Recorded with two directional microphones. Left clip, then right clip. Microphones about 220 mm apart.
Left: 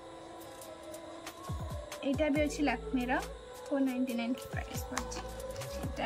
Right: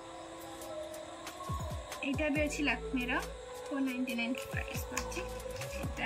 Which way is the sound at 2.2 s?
15° left (ahead or behind).